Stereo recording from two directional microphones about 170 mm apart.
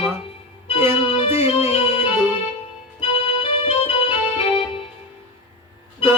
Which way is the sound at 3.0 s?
35° left (ahead or behind).